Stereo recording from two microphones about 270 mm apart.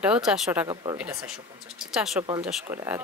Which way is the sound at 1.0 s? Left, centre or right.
Centre.